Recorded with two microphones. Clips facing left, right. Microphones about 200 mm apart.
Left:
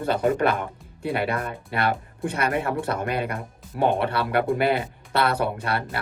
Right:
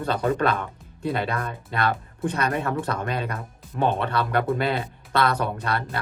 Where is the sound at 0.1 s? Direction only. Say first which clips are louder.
Left 2 dB; 10° left (ahead or behind).